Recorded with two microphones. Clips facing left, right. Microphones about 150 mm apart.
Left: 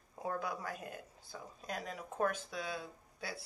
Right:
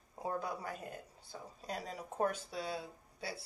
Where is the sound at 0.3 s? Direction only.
30° right (ahead or behind).